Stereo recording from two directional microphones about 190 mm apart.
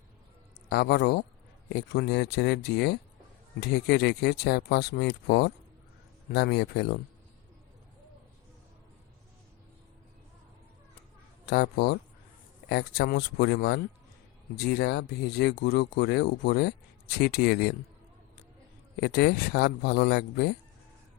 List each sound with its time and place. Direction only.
0.7 s speech: 60° left (ahead or behind)
11.4 s speech: 60° left (ahead or behind)
18.9 s speech: 60° left (ahead or behind)